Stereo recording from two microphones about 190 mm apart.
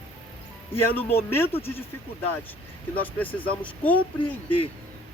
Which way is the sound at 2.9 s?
10° left (ahead or behind).